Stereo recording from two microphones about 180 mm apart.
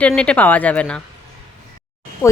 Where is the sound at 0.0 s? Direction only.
5° left (ahead or behind).